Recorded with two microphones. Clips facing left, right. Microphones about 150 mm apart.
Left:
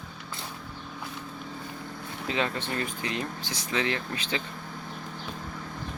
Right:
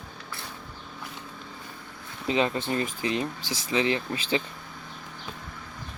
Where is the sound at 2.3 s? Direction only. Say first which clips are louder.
Right 5 dB; 20° right (ahead or behind).